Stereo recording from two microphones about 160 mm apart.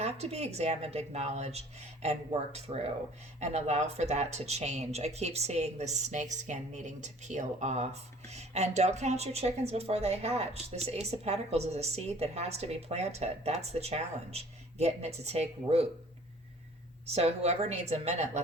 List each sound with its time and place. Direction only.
0.0 s a woman's voice: 40° right (ahead or behind)
17.1 s speech: 40° right (ahead or behind)